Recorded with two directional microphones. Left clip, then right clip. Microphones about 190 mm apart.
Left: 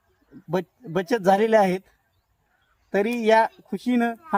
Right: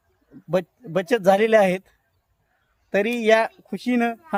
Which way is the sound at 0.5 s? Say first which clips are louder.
Right 3 dB; 25° right (ahead or behind).